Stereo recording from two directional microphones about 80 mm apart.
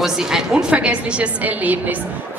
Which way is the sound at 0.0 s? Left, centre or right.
Centre.